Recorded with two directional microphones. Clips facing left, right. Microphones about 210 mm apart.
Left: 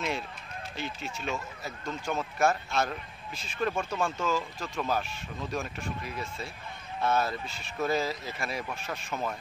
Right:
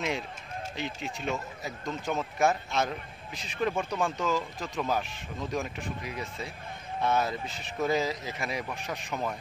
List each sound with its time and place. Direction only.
0.7 s a man's voice: 20° right (ahead or behind)